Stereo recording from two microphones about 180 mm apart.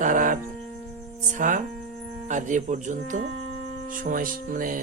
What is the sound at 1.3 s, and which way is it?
Speech, 45° right (ahead or behind).